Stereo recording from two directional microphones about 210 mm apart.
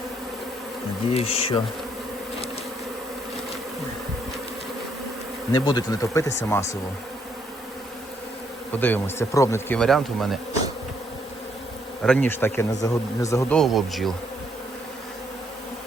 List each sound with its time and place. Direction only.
1.1 s bee: 30° left (ahead or behind)
5.5 s speech: 20° left (ahead or behind)
8.7 s speech: 10° left (ahead or behind)
12.0 s speech: 5° left (ahead or behind)
13.6 s speech: centre (ahead or behind)